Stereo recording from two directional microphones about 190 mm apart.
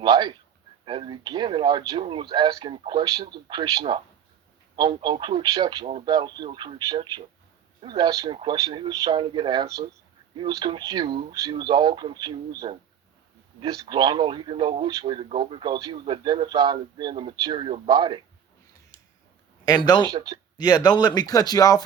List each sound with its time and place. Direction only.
0.0 s a sound: 25° right (ahead or behind)
0.9 s speech: 25° right (ahead or behind)
19.6 s speech: 20° left (ahead or behind)
20.1 s speech: 20° right (ahead or behind)
20.6 s speech: 20° left (ahead or behind)